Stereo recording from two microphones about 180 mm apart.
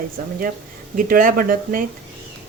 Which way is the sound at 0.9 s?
50° right (ahead or behind).